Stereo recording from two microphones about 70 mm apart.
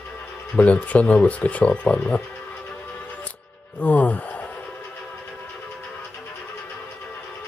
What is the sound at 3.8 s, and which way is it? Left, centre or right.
Speech, left.